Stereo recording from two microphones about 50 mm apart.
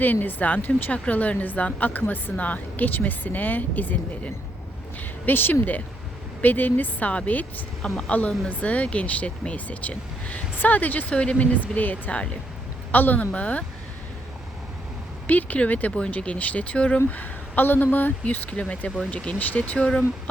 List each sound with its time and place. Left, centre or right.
0.0 s a woman's voice: left
7.8 s speech: centre
8.4 s a woman's voice: left
11.1 s speech: left
11.7 s a woman's voice: left
12.1 s speech: left
12.9 s a woman's voice: left
15.3 s a woman's voice: left
17.1 s a woman's voice: left